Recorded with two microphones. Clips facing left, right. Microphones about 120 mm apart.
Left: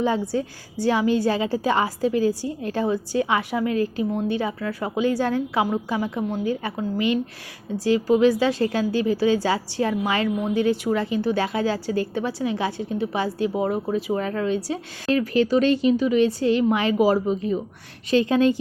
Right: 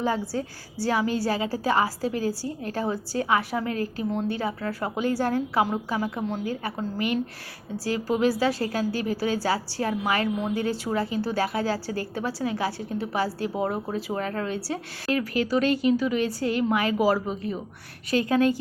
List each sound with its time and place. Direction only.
0.0 s a woman's voice: 20° left (ahead or behind)